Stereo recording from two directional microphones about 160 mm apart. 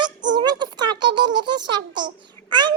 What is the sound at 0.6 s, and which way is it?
Child singing, 25° right (ahead or behind).